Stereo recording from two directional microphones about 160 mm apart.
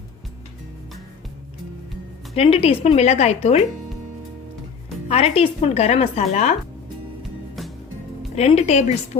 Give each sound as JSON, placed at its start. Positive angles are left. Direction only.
{"t": 2.3, "sound": "a woman's voice", "side_deg": 40}
{"t": 5.0, "sound": "a woman's voice", "side_deg": 40}
{"t": 7.2, "sound": "music", "side_deg": 0}
{"t": 8.4, "sound": "speech", "side_deg": 40}